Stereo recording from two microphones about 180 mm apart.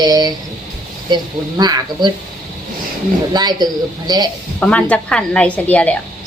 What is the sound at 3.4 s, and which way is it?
Speech, 25° right (ahead or behind).